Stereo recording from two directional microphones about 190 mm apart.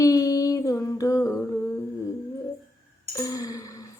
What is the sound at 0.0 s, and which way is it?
Humming, 15° left (ahead or behind).